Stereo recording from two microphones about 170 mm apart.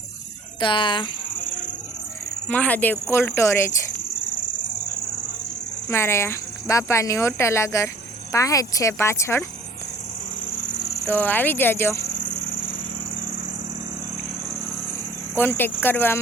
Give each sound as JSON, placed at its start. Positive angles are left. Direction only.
{"t": 0.6, "sound": "speech", "side_deg": 30}
{"t": 2.5, "sound": "speech", "side_deg": 10}
{"t": 5.9, "sound": "speech", "side_deg": 15}
{"t": 11.0, "sound": "speech", "side_deg": 10}
{"t": 15.4, "sound": "speech", "side_deg": 10}